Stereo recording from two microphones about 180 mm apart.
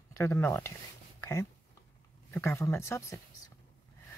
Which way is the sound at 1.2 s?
15° left (ahead or behind).